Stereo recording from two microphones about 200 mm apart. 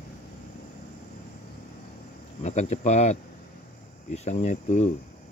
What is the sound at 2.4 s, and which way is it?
Speech, 35° left (ahead or behind).